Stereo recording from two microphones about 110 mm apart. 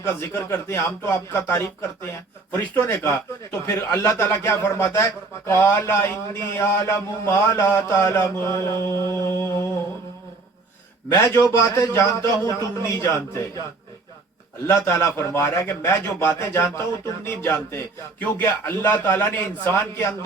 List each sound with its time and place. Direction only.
0.2 s a man's voice: 25° left (ahead or behind)
11.1 s a man's voice: 30° left (ahead or behind)
14.7 s a man's voice: 25° left (ahead or behind)